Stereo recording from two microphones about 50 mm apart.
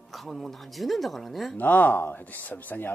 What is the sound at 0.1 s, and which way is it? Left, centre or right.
Speech, centre.